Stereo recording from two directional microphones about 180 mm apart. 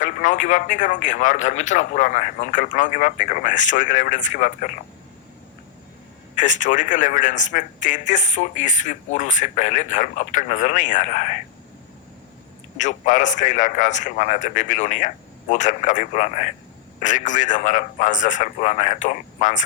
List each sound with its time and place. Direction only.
0.0 s a man's voice: 45° left (ahead or behind)
6.3 s a man's voice: 45° left (ahead or behind)
12.7 s a man's voice: 45° left (ahead or behind)